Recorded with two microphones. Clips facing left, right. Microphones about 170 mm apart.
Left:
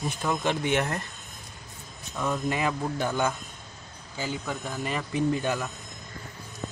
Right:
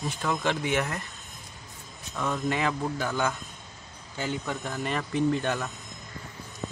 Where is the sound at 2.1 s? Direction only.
10° left (ahead or behind).